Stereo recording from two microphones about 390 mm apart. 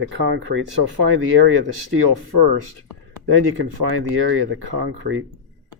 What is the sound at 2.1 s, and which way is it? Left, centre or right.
Speech, right.